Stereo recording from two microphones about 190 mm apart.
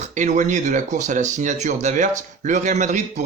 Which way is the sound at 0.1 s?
40° right (ahead or behind).